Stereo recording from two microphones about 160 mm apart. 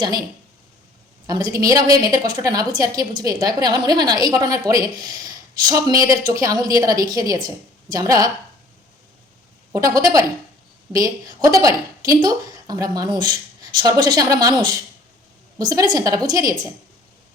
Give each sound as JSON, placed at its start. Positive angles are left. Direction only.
{"t": 1.3, "sound": "a woman's voice", "side_deg": -25}
{"t": 9.7, "sound": "a woman's voice", "side_deg": -20}